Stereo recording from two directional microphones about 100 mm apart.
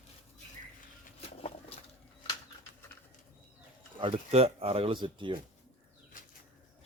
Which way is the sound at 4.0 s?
80° right.